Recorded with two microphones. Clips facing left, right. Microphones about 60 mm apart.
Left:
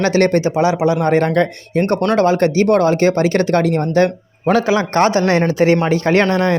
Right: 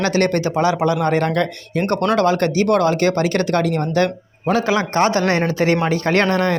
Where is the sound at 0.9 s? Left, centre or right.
Left.